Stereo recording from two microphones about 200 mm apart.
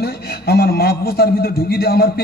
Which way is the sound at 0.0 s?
50° left (ahead or behind).